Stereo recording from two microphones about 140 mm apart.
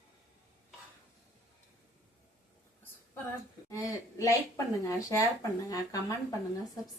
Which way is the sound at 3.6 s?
25° left (ahead or behind).